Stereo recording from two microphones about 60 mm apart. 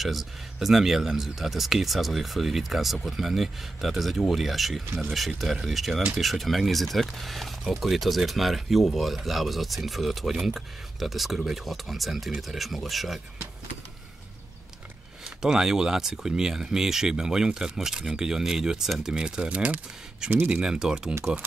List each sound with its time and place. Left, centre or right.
0.0 s speech: centre
15.2 s speech: centre
20.2 s speech: right
20.6 s speech: centre